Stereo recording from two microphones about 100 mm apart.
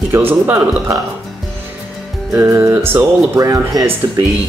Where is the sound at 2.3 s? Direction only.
25° right (ahead or behind).